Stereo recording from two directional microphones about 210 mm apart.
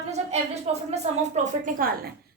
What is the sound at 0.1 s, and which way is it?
A woman's voice, 30° right (ahead or behind).